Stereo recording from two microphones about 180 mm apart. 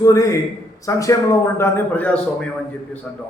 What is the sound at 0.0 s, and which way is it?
A man's voice, 20° left (ahead or behind).